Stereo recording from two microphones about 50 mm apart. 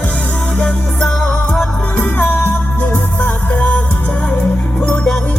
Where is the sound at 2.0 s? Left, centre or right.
Left.